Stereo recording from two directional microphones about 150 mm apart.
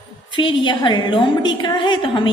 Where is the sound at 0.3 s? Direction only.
30° left (ahead or behind).